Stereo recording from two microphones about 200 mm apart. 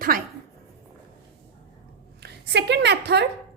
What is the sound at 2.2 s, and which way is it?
A woman's voice, 60° right (ahead or behind).